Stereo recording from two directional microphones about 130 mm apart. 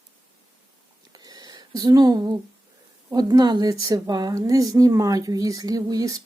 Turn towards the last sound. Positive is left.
turn(degrees=-30)  # may be behind; listen again after turning